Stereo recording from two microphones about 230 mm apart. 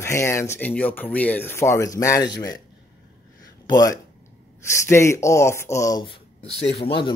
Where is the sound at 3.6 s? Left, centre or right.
Centre.